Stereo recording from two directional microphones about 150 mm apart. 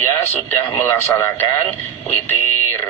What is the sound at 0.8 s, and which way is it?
Speech, 15° left (ahead or behind).